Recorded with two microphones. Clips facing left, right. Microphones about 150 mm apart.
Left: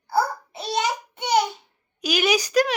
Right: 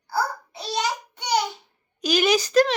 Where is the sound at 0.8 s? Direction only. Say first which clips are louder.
Left 2 dB; 20° left (ahead or behind).